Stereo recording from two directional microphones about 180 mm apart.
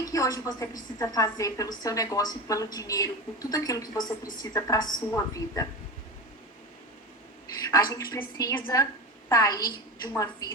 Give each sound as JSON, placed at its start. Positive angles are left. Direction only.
{"t": 0.0, "sound": "a woman's voice", "side_deg": 20}
{"t": 7.6, "sound": "a sound", "side_deg": 20}
{"t": 7.9, "sound": "a woman's voice", "side_deg": 20}